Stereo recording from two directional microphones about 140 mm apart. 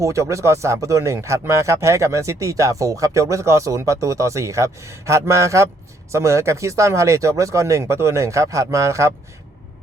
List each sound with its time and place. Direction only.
0.0 s a man's voice: 20° right (ahead or behind)